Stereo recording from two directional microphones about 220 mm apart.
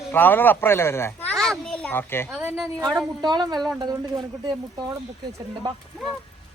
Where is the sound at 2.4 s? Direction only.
5° right (ahead or behind).